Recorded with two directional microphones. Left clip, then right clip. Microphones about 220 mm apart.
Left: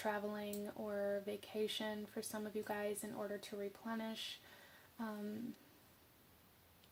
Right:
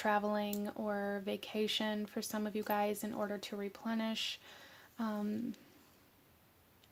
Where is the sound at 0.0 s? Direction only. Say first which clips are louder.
Right 8 dB; 40° right (ahead or behind).